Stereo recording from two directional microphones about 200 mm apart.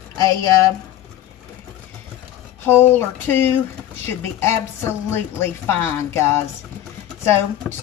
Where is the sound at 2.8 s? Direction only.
10° left (ahead or behind).